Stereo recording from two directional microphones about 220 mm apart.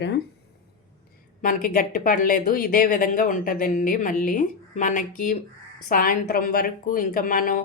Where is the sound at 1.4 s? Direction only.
40° left (ahead or behind).